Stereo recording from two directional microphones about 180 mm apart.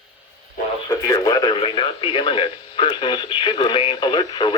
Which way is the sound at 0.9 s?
20° left (ahead or behind).